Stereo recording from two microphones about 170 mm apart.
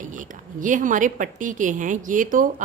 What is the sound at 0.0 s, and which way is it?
A woman's voice, 50° right (ahead or behind).